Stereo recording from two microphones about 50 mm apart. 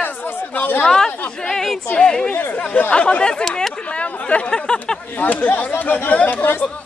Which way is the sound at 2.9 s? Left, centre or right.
Left.